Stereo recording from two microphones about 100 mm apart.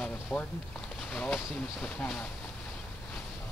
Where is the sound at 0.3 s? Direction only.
15° left (ahead or behind).